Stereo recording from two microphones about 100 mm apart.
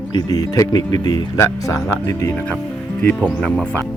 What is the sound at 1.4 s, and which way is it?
Speech, 30° left (ahead or behind).